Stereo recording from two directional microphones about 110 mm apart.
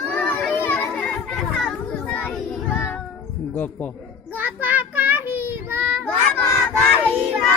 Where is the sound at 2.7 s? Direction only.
20° left (ahead or behind).